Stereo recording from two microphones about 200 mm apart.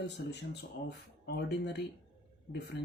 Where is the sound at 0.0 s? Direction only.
55° left (ahead or behind).